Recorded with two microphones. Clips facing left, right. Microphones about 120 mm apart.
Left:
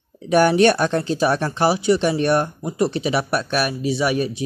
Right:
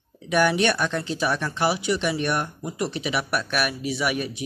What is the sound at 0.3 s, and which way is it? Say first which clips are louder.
Speech: left 6 dB; 35° left (ahead or behind).